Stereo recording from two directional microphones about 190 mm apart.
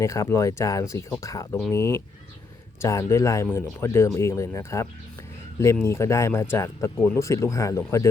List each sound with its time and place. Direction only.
0.0 s speech: 15° left (ahead or behind)